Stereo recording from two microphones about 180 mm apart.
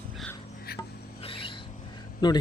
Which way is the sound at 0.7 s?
60° left (ahead or behind).